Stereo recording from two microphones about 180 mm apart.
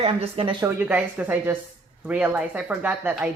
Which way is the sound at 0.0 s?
30° right (ahead or behind).